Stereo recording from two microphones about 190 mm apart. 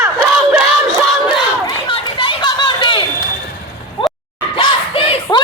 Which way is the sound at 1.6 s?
25° left (ahead or behind).